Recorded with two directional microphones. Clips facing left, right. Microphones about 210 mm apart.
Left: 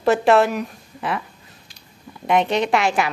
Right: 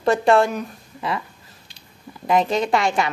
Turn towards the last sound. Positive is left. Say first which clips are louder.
# left 1 dB
turn(degrees=0)  # may be behind; listen again after turning